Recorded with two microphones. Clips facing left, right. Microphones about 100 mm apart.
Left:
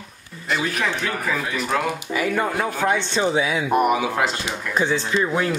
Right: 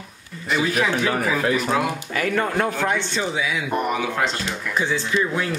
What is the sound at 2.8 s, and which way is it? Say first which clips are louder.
Speech: left 3 dB; 20° left (ahead or behind).